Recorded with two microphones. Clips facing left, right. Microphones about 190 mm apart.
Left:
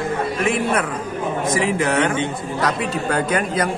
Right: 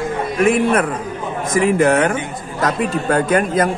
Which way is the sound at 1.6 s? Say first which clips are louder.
Right 7 dB; 50° right (ahead or behind).